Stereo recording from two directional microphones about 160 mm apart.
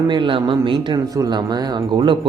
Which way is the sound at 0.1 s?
30° right (ahead or behind).